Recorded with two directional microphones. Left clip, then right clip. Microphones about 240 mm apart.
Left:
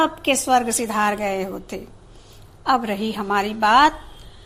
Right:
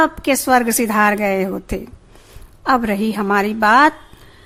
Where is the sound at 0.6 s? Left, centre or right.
Right.